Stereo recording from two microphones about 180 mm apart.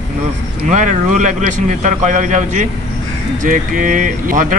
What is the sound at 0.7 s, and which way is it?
Speech, 45° right (ahead or behind).